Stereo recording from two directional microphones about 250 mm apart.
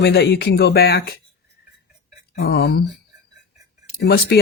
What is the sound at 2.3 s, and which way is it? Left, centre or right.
Speech, left.